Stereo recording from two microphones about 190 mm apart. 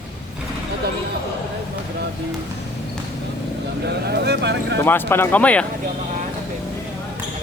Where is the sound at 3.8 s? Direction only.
60° right (ahead or behind).